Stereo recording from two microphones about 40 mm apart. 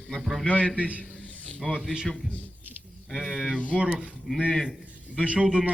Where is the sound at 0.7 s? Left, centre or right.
Right.